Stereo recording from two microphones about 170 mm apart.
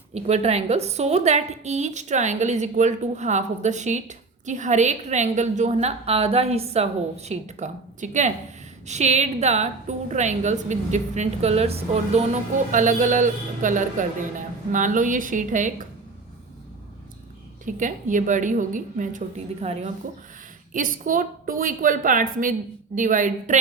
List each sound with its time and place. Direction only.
0.1 s a woman's voice: 40° right (ahead or behind)
17.7 s a woman's voice: 50° right (ahead or behind)
19.6 s a woman's voice: 40° right (ahead or behind)
20.7 s a woman's voice: 55° right (ahead or behind)